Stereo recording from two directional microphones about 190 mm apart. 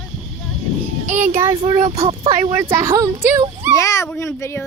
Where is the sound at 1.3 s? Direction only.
15° right (ahead or behind).